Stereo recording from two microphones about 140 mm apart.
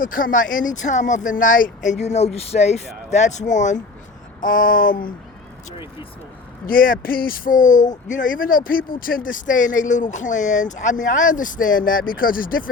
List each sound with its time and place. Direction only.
0.0 s speech: 75° left (ahead or behind); by 3.8 s 60° left (ahead or behind)
4.4 s a sound: 75° left (ahead or behind)
5.7 s speech: 40° left (ahead or behind)
6.7 s speech: 85° left